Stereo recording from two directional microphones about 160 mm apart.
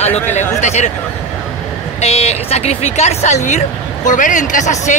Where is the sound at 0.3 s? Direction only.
45° left (ahead or behind).